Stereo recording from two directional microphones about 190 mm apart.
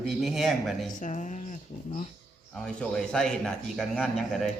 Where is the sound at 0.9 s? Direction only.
40° left (ahead or behind).